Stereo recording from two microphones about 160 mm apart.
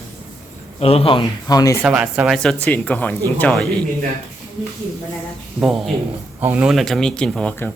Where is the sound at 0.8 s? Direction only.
40° left (ahead or behind).